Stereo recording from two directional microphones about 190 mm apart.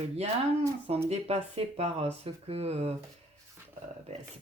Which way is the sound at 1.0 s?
35° right (ahead or behind).